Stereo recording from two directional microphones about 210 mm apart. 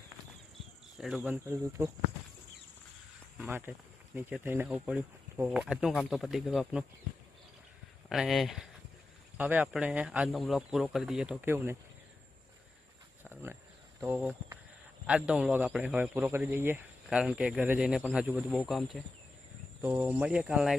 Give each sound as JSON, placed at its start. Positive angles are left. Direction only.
{"t": 0.9, "sound": "speech", "side_deg": 0}
{"t": 3.3, "sound": "speech", "side_deg": -5}
{"t": 8.1, "sound": "speech", "side_deg": 0}
{"t": 13.2, "sound": "a sound", "side_deg": -10}
{"t": 15.0, "sound": "speech", "side_deg": -5}